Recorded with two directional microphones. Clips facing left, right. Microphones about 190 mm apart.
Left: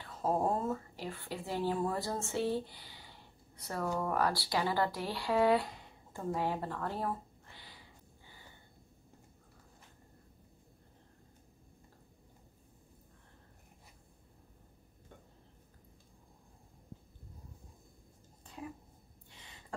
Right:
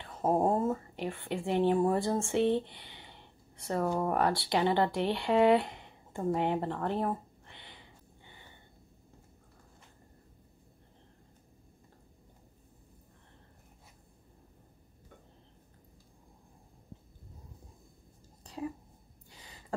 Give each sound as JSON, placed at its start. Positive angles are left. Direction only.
{"t": 0.0, "sound": "speech", "side_deg": -20}